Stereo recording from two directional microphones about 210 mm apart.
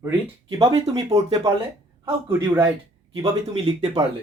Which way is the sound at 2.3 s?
10° right (ahead or behind).